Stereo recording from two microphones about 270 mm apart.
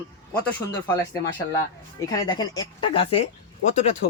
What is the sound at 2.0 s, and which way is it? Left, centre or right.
Speech, centre.